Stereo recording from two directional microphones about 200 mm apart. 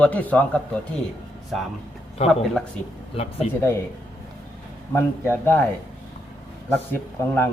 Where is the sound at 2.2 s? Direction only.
30° left (ahead or behind).